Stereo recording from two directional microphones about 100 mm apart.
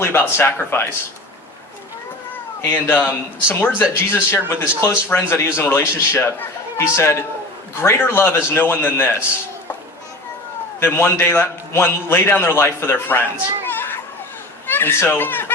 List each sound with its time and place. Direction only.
0.0 s a man's voice: 20° left (ahead or behind)
2.6 s a man's voice: 20° left (ahead or behind)
10.8 s a man's voice: 20° left (ahead or behind)
13.7 s children playing: 20° left (ahead or behind)
14.7 s speech: 20° left (ahead or behind)